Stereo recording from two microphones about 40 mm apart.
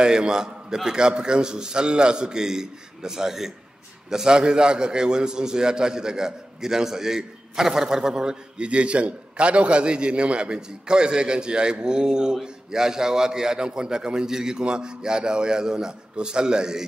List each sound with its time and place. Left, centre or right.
0.0 s a man's voice: right
8.6 s a man's voice: right